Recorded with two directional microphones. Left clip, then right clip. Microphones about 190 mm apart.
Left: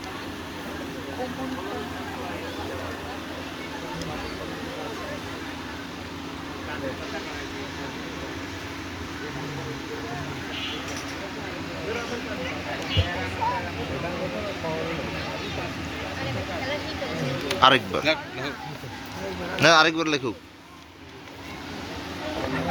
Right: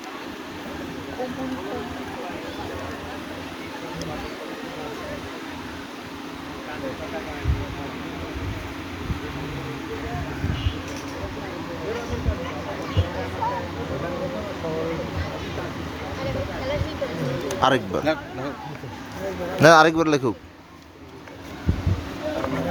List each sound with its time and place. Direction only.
17.5 s speech: 20° right (ahead or behind)
18.0 s speech: 55° right (ahead or behind)
19.5 s a man's voice: 40° right (ahead or behind)